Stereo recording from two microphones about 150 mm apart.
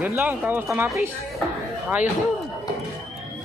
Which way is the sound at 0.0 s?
15° right (ahead or behind).